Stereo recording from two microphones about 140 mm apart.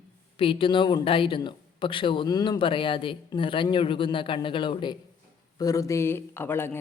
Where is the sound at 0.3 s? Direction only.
40° left (ahead or behind).